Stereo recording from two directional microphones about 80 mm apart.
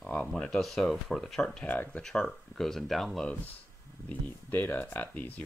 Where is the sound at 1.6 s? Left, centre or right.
Left.